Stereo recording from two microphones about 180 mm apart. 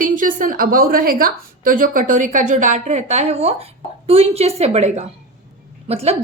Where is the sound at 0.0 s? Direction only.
50° right (ahead or behind).